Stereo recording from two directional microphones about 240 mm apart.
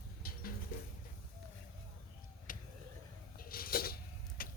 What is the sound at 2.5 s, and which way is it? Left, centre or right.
Vehicle, left.